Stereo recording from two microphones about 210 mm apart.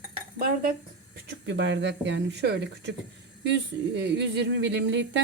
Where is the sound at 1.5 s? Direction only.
60° right (ahead or behind).